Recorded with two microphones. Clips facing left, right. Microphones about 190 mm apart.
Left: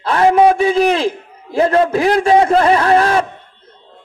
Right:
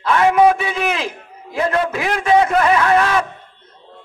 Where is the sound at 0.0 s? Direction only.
35° left (ahead or behind).